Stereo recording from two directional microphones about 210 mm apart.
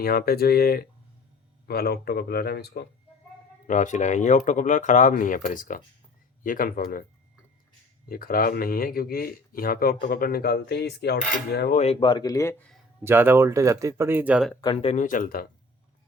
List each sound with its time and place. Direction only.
0.0 s speech: 45° left (ahead or behind)
3.7 s speech: 35° left (ahead or behind)
8.1 s speech: 45° left (ahead or behind)
11.8 s speech: 25° left (ahead or behind); by 12.8 s 5° left (ahead or behind)
13.1 s speech: 10° right (ahead or behind)
14.6 s speech: 25° left (ahead or behind); by 15.4 s 40° left (ahead or behind)